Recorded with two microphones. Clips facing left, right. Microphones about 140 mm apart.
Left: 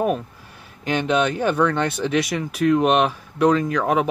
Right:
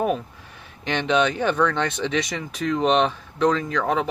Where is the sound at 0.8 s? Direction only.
5° left (ahead or behind).